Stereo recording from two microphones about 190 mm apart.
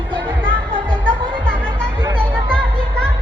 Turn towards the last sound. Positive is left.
turn(degrees=5)  # may be behind; listen again after turning